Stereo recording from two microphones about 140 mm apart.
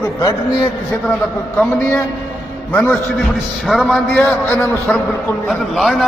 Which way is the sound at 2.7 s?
15° left (ahead or behind).